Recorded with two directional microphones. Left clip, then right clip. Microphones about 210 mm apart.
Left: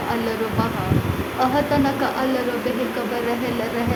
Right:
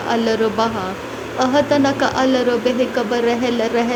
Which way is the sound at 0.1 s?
25° right (ahead or behind).